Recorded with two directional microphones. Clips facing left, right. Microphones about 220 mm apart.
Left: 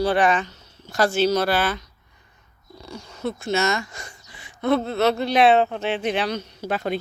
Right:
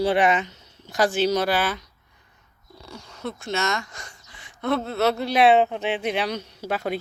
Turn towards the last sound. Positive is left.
turn(degrees=-10)  # may be behind; listen again after turning